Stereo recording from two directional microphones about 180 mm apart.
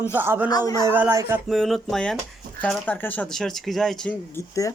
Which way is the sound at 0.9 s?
10° right (ahead or behind).